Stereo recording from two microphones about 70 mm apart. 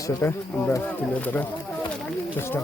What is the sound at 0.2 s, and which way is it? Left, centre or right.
Speech, left.